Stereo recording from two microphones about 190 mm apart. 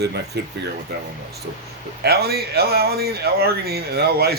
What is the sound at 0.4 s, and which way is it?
Speech, 60° right (ahead or behind).